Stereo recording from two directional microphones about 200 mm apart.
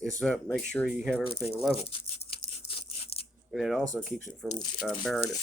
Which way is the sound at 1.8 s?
30° left (ahead or behind).